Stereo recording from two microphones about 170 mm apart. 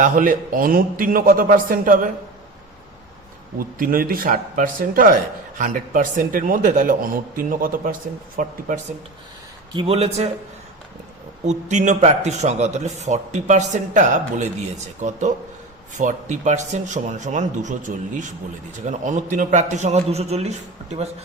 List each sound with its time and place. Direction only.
0.0 s a man's voice: 50° right (ahead or behind)
3.6 s a man's voice: 55° right (ahead or behind)
9.7 s a man's voice: 35° right (ahead or behind)
11.4 s a man's voice: 45° right (ahead or behind)